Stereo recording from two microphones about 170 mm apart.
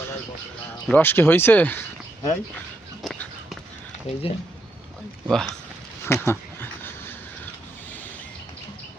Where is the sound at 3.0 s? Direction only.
Centre (ahead or behind).